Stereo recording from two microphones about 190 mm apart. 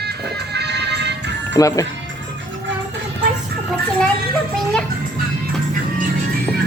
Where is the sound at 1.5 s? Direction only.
20° left (ahead or behind).